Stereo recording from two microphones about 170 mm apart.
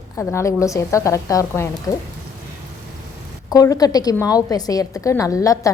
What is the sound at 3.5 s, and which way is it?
A woman's voice, 20° left (ahead or behind).